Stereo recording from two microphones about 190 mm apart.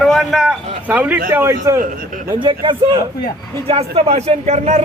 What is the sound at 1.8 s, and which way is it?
Speech, 45° right (ahead or behind).